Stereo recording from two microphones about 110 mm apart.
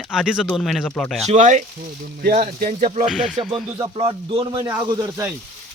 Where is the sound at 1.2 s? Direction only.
90° right.